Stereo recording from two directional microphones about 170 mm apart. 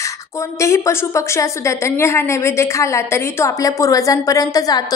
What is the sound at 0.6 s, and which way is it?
A woman's voice, 15° left (ahead or behind).